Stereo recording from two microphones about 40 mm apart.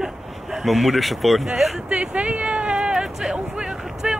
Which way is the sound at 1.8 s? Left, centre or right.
Right.